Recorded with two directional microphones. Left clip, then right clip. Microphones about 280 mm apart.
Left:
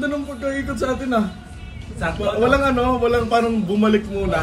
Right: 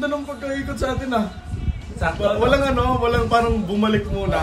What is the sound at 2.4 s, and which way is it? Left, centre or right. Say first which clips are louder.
A man's voice: left 3 dB; centre.